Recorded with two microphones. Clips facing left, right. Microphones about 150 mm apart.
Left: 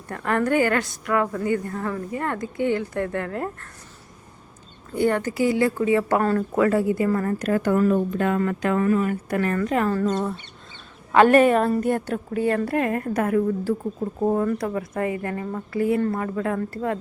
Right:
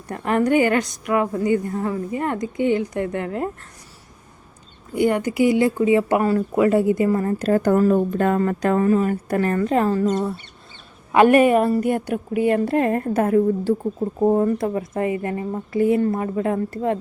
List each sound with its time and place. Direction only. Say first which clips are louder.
0.1 s a woman's voice: right 3 dB; 20° right (ahead or behind)
4.9 s a woman's voice: right 3 dB; 15° right (ahead or behind)
9.9 s speech: right 3 dB; 15° right (ahead or behind)
12.7 s a woman's voice: right 4 dB; 30° right (ahead or behind)